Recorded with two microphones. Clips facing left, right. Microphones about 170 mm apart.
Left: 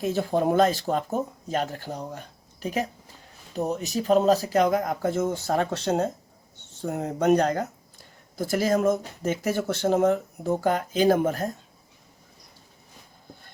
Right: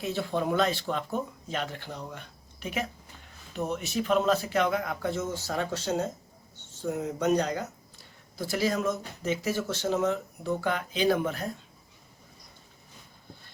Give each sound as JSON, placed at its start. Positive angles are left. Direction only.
{"t": 0.0, "sound": "speech", "side_deg": 45}